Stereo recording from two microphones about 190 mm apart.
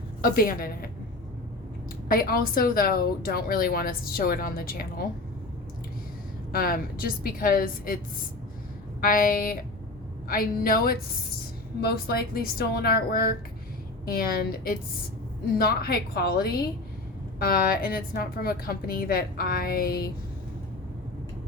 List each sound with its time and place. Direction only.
0.2 s a woman's voice: 50° left (ahead or behind)
2.0 s a woman's voice: 50° left (ahead or behind)
6.5 s a woman's voice: 50° left (ahead or behind)
9.0 s a woman's voice: 50° left (ahead or behind)